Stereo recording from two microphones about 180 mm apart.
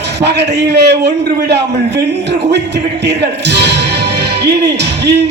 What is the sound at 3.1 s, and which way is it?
A man's voice, 70° right (ahead or behind).